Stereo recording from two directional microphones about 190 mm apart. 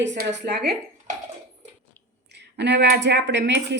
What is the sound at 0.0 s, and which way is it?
Speech, 70° right (ahead or behind).